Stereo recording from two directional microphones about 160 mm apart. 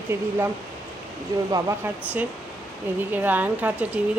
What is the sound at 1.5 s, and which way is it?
Speech, 20° right (ahead or behind).